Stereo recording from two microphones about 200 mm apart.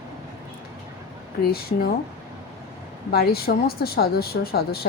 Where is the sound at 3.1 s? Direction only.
50° left (ahead or behind).